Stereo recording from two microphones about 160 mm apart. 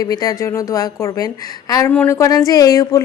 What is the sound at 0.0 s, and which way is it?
A woman's voice, 25° left (ahead or behind).